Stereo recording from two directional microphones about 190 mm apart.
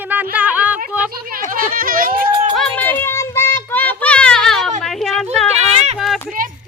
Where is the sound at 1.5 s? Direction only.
50° right (ahead or behind).